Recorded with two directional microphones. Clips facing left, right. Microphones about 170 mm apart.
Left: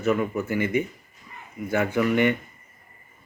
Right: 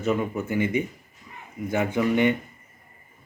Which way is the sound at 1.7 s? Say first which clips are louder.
Left 1 dB; 20° right (ahead or behind).